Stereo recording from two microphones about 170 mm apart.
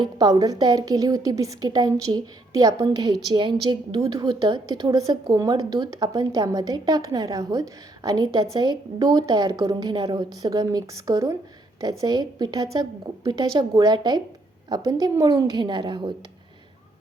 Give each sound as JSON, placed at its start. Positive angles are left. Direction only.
{"t": 0.0, "sound": "a woman's voice", "side_deg": -25}